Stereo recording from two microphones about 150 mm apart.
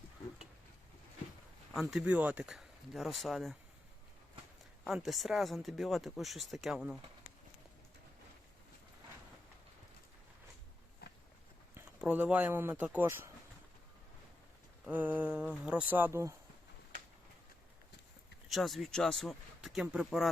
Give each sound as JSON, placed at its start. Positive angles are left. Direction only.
{"t": 1.7, "sound": "speech", "side_deg": -5}
{"t": 4.9, "sound": "speech", "side_deg": 0}
{"t": 11.0, "sound": "a sound", "side_deg": 90}
{"t": 11.7, "sound": "speech", "side_deg": -10}
{"t": 14.8, "sound": "speech", "side_deg": -10}
{"t": 18.4, "sound": "speech", "side_deg": 0}